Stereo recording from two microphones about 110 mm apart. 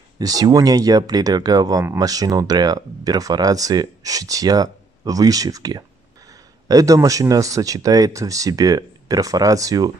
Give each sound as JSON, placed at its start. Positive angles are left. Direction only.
{"t": 0.2, "sound": "speech", "side_deg": -35}